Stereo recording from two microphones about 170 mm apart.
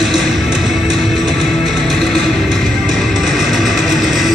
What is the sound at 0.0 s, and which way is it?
Music, centre (ahead or behind).